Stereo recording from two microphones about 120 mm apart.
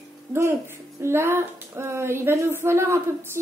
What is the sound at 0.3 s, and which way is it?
A woman's voice, 20° right (ahead or behind).